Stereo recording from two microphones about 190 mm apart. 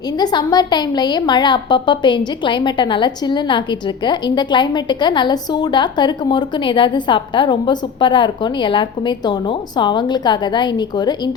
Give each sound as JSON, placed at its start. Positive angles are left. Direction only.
{"t": 0.2, "sound": "a woman's voice", "side_deg": 20}